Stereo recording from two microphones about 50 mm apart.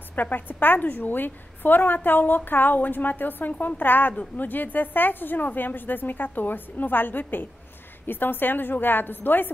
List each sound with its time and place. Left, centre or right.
0.1 s a woman's voice: left